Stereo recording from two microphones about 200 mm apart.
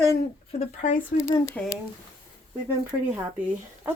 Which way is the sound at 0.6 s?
40° left (ahead or behind).